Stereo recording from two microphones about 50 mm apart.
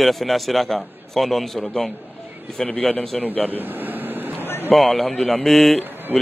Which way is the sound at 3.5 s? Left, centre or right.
Right.